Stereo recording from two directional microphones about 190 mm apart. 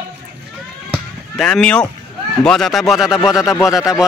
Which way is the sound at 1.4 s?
5° left (ahead or behind).